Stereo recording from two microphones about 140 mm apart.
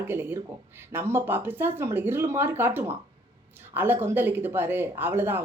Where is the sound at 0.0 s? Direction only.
15° right (ahead or behind).